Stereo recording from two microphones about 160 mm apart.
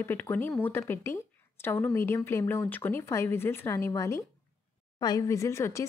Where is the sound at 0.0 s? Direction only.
10° left (ahead or behind).